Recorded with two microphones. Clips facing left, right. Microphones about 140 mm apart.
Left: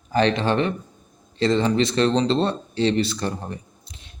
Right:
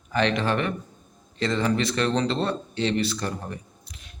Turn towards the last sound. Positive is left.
turn(degrees=30)  # may be behind; listen again after turning